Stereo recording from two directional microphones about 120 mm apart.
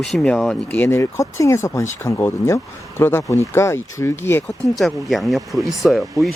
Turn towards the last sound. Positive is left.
turn(degrees=0)  # may be behind; listen again after turning